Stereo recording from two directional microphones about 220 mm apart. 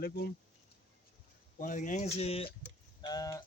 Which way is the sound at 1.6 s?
35° left (ahead or behind).